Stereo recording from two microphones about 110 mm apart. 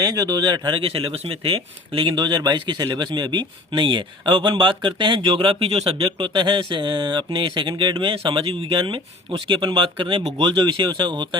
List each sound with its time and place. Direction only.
0.2 s speech: 40° right (ahead or behind)